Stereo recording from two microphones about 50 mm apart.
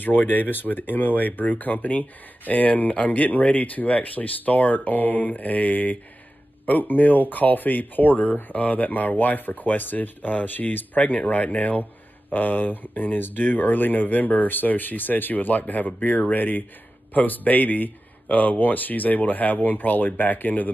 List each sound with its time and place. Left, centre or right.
0.0 s speech: left